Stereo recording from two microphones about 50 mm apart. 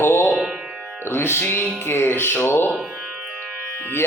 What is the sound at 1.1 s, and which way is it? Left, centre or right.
Speech, left.